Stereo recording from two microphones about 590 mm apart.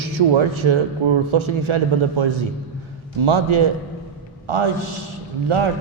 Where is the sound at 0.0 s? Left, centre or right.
Right.